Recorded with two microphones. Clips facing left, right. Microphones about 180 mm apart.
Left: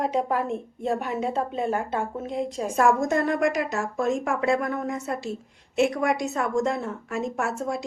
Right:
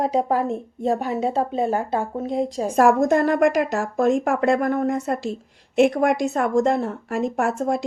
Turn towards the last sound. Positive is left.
turn(degrees=-55)  # may be behind; listen again after turning